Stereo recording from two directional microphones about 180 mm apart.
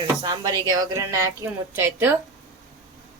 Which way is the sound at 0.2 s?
20° right (ahead or behind).